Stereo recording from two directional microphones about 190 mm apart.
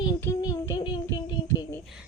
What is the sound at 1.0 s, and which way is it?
Music, 15° left (ahead or behind).